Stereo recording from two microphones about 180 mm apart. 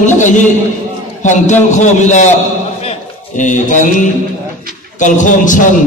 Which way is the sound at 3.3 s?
45° left (ahead or behind).